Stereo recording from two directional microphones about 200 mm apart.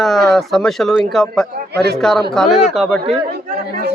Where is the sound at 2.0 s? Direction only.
Centre (ahead or behind).